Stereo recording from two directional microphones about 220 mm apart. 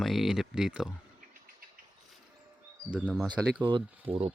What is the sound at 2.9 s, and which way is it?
Speech, 5° right (ahead or behind).